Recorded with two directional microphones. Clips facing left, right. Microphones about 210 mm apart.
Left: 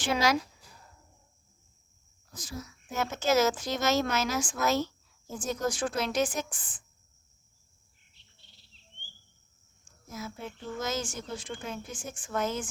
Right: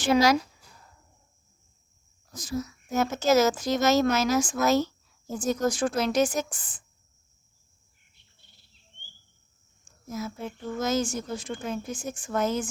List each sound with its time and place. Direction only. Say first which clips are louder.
0.0 s speech: right 6 dB; 40° right (ahead or behind)
2.3 s a woman's voice: right 9 dB; 40° right (ahead or behind)
10.1 s speech: right 6 dB; 40° right (ahead or behind)